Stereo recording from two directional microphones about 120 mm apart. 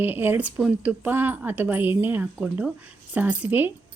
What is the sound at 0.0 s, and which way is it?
Speech, 15° right (ahead or behind).